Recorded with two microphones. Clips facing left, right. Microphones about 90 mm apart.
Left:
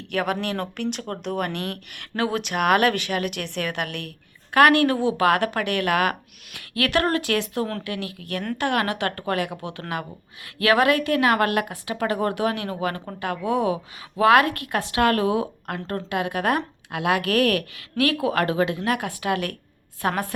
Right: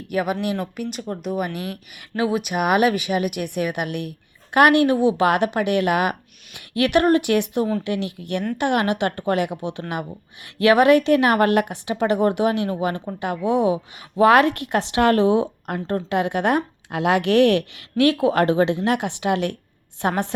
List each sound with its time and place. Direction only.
0.1 s a woman's voice: 5° right (ahead or behind); by 20.3 s 25° right (ahead or behind)